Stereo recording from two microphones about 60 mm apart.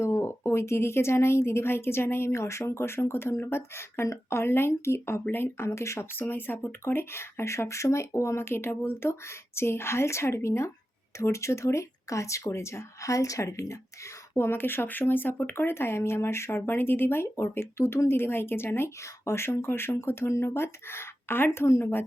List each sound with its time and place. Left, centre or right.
0.0 s a woman's voice: left
6.1 s a woman's voice: left
14.3 s a woman's voice: left